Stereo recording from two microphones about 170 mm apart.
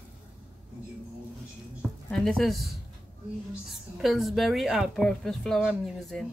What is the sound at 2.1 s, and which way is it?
A woman's voice, 5° left (ahead or behind).